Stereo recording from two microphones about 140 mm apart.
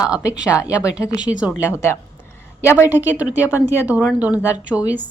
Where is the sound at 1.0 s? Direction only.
30° left (ahead or behind).